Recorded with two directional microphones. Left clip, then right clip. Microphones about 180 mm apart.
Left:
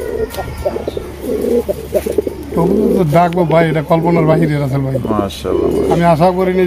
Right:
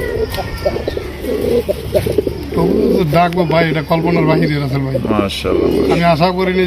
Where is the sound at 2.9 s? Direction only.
70° left (ahead or behind).